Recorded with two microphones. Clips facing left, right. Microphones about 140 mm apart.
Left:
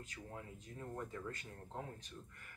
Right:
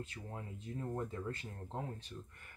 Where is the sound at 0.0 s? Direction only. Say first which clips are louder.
Right 4 dB; 30° right (ahead or behind).